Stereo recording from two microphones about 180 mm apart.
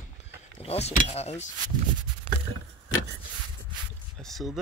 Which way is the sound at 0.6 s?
35° left (ahead or behind).